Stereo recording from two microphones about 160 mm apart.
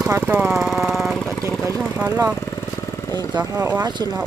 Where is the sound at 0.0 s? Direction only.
15° right (ahead or behind); by 1.3 s centre (ahead or behind).